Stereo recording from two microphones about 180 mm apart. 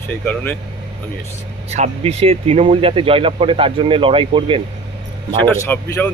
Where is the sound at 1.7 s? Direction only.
35° right (ahead or behind).